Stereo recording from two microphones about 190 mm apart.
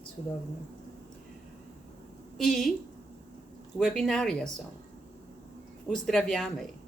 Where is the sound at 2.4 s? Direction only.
Centre (ahead or behind).